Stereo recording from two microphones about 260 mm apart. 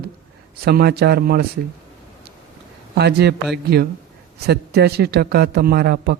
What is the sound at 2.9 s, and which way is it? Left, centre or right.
A man's voice, right.